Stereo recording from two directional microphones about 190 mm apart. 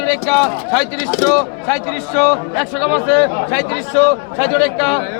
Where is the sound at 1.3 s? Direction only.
5° left (ahead or behind).